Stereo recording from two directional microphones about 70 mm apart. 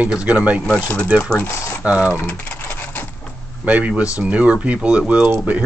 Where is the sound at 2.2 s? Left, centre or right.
Left.